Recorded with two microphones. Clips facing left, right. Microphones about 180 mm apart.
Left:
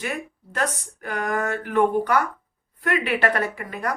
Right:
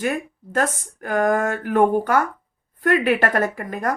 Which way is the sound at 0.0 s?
45° right (ahead or behind).